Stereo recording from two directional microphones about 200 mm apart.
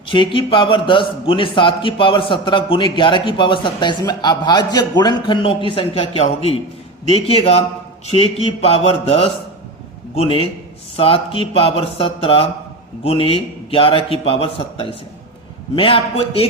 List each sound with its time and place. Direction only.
0.1 s a man's voice: 25° left (ahead or behind)